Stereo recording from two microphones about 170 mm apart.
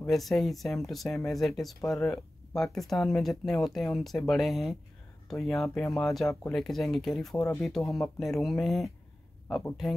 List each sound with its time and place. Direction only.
0.0 s speech: centre (ahead or behind)
7.3 s speech: 15° left (ahead or behind)
7.6 s speech: centre (ahead or behind)